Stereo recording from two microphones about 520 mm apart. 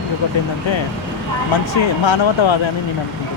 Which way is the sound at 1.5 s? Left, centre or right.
Left.